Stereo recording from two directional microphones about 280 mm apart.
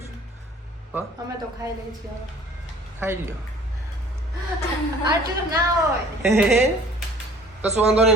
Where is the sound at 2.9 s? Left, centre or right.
Centre.